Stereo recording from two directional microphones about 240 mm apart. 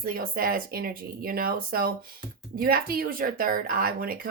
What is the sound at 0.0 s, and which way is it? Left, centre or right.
Speech, right.